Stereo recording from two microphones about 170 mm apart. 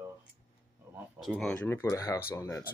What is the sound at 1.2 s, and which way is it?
Speech, centre (ahead or behind).